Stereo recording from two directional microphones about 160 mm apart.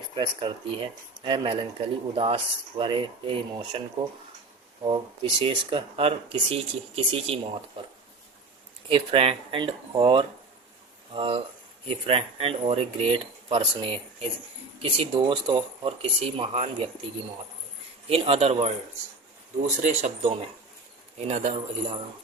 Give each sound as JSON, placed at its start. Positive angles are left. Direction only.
{"t": 0.1, "sound": "speech", "side_deg": -30}
{"t": 4.9, "sound": "speech", "side_deg": -35}
{"t": 8.9, "sound": "speech", "side_deg": -35}
{"t": 18.1, "sound": "speech", "side_deg": -40}